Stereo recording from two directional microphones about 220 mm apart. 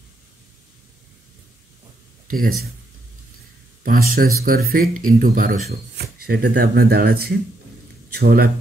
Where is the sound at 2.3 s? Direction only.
40° right (ahead or behind).